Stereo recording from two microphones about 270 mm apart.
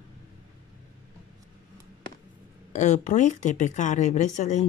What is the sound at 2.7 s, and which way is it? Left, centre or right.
Speech, left.